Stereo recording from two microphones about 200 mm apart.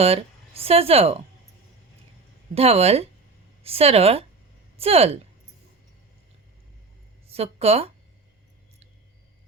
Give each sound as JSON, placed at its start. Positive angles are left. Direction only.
{"t": 0.0, "sound": "speech", "side_deg": -30}
{"t": 2.6, "sound": "speech", "side_deg": -30}
{"t": 7.3, "sound": "speech", "side_deg": -30}